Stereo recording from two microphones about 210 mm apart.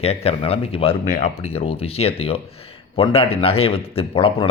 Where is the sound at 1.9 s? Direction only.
30° left (ahead or behind).